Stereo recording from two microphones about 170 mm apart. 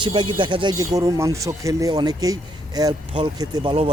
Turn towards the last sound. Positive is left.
turn(degrees=-30)  # may be behind; listen again after turning